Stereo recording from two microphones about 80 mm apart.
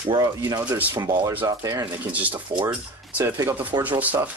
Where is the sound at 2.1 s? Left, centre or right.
Centre.